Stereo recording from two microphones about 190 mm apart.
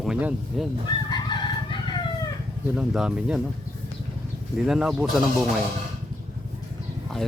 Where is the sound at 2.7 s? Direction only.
5° right (ahead or behind).